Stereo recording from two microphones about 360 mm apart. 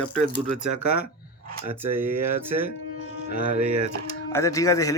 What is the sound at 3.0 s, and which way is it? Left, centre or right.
Music, left.